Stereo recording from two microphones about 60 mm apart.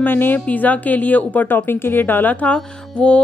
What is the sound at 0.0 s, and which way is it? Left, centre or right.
Music, left.